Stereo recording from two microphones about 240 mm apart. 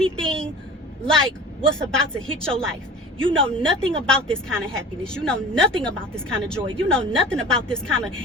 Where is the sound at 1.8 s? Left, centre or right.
Centre.